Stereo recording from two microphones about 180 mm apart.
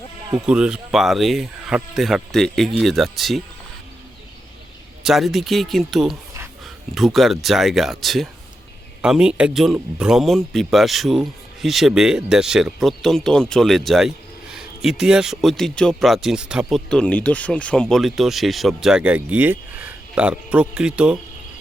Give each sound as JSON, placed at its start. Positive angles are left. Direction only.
{"t": 0.3, "sound": "speech", "side_deg": -5}
{"t": 5.0, "sound": "speech", "side_deg": 0}